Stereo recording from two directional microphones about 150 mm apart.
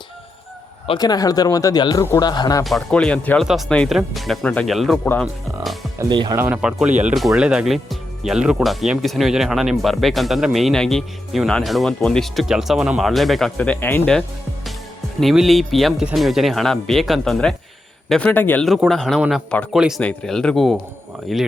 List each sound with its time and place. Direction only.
0.9 s speech: 25° left (ahead or behind)
2.6 s speech: 5° left (ahead or behind)
6.0 s speech: 30° right (ahead or behind)
6.3 s speech: 15° right (ahead or behind)
6.6 s speech: 5° right (ahead or behind)
13.6 s a man's voice: 10° left (ahead or behind)
18.6 s speech: centre (ahead or behind)